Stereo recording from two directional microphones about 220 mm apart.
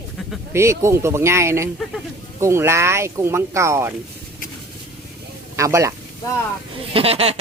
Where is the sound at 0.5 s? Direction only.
10° right (ahead or behind).